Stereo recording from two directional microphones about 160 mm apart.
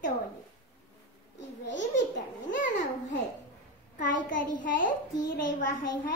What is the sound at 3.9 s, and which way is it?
A child's voice, 55° left (ahead or behind).